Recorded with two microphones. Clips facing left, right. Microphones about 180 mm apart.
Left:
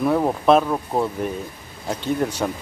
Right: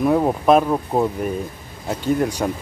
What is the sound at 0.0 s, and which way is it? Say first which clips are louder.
Speech: right 2 dB; 10° right (ahead or behind).